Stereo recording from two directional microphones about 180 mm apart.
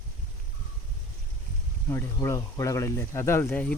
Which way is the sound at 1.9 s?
15° left (ahead or behind).